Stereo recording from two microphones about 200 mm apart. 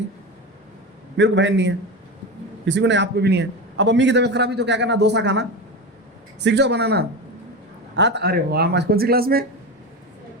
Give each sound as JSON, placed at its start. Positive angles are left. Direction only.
{"t": 1.1, "sound": "a man's voice", "side_deg": -65}